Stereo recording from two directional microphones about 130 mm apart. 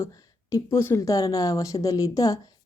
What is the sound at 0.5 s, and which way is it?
Speech, 20° left (ahead or behind).